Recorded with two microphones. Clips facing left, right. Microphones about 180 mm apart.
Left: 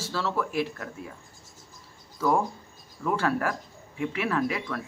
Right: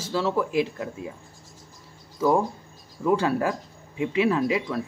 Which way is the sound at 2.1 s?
20° right (ahead or behind).